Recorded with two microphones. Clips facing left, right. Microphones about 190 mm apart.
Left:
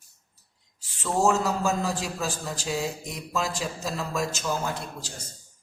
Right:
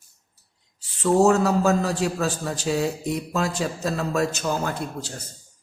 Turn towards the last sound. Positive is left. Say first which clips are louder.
# right 4 dB
turn(degrees=-60)  # may be behind; listen again after turning